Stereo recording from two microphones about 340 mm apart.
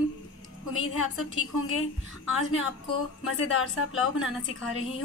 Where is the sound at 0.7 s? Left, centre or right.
Left.